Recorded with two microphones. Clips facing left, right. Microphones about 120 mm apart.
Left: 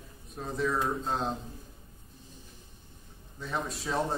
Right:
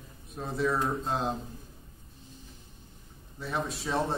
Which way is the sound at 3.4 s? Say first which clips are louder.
Right 1 dB; centre (ahead or behind).